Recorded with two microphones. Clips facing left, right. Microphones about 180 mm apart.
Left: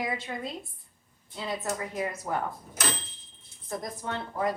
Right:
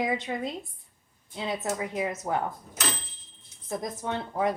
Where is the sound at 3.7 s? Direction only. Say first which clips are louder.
Right 3 dB; 20° right (ahead or behind).